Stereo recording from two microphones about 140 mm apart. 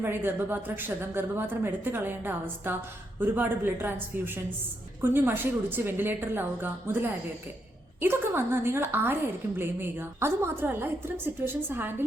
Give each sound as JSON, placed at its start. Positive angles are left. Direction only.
{"t": 0.0, "sound": "a woman's voice", "side_deg": -15}